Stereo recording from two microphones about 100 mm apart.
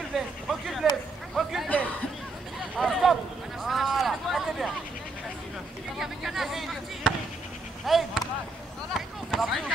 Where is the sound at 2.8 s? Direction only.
Centre (ahead or behind).